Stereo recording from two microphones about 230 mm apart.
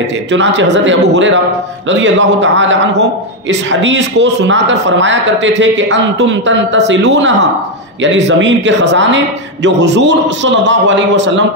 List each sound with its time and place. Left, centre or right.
0.3 s a man's voice: right